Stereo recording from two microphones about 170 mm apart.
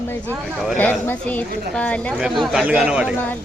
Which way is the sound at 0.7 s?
10° left (ahead or behind).